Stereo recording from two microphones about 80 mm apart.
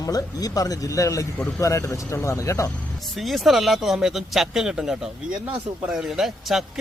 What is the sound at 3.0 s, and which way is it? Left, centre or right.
Speech, centre.